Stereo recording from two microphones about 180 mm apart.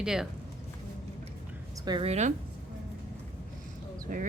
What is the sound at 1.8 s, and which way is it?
Speech, 25° right (ahead or behind).